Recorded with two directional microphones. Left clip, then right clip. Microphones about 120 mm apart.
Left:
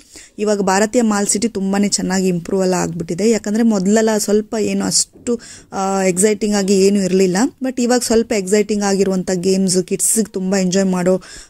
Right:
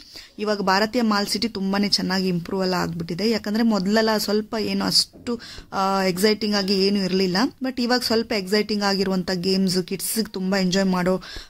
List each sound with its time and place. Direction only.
0.4 s speech: 40° left (ahead or behind)